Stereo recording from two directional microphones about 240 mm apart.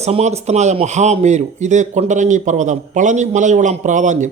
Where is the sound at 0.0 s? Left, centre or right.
Right.